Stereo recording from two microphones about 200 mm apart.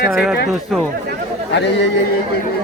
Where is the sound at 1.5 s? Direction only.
60° left (ahead or behind).